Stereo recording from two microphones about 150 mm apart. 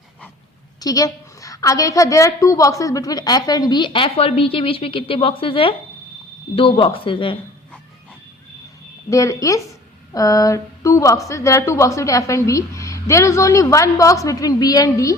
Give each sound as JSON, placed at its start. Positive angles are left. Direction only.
{"t": 0.8, "sound": "a woman's voice", "side_deg": 25}
{"t": 9.0, "sound": "a woman's voice", "side_deg": 20}